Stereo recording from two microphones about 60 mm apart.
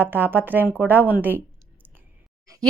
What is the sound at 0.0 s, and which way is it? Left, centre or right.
A woman's voice, right.